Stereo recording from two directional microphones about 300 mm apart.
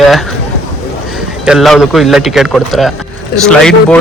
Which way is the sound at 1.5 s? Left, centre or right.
Centre.